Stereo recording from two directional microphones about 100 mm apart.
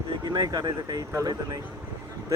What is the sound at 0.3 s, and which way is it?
Speech, 35° right (ahead or behind).